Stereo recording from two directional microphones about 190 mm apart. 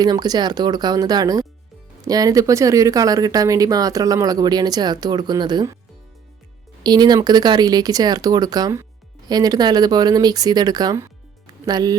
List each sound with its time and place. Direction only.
0.0 s speech: 20° right (ahead or behind)
6.8 s speech: 20° right (ahead or behind)